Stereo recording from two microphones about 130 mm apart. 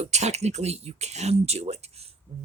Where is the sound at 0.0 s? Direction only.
60° right (ahead or behind).